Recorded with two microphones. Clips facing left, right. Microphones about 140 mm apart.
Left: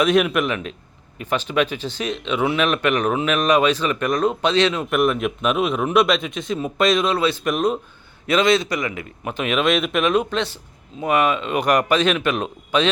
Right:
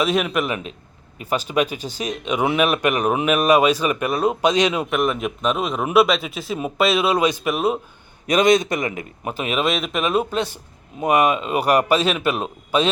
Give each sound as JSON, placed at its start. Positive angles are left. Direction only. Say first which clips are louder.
{"t": 0.0, "sound": "a man's voice", "louder": "left 3 dB", "side_deg": 0}
{"t": 4.9, "sound": "a man's voice", "louder": "left 2 dB", "side_deg": 0}
{"t": 8.3, "sound": "speech", "louder": "right 2 dB", "side_deg": -20}
{"t": 9.6, "sound": "a man's voice", "louder": "left 3 dB", "side_deg": 0}